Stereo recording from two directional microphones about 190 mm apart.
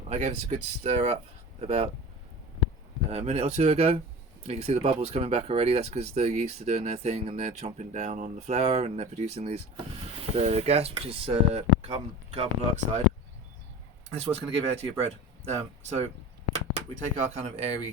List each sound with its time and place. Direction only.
0.1 s speech: 35° right (ahead or behind)
3.1 s speech: 35° right (ahead or behind)
14.1 s speech: 30° right (ahead or behind)